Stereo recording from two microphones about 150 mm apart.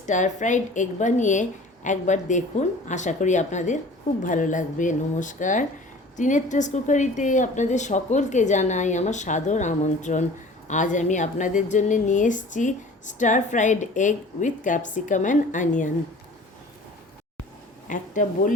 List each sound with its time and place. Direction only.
0.0 s a woman's voice: 55° left (ahead or behind)
17.8 s a woman's voice: 60° left (ahead or behind)